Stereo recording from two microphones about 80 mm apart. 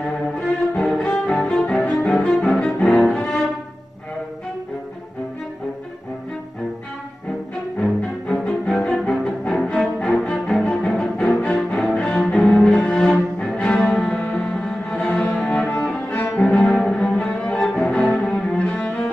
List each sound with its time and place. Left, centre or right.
0.0 s cello: centre
7.8 s cello: centre